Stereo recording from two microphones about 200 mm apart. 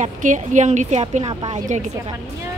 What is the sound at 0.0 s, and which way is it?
A woman's voice, 40° right (ahead or behind).